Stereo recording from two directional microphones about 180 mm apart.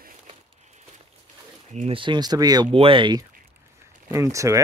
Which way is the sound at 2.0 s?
25° right (ahead or behind).